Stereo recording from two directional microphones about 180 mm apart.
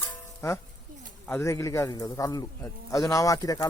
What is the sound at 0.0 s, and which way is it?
Music, 15° left (ahead or behind).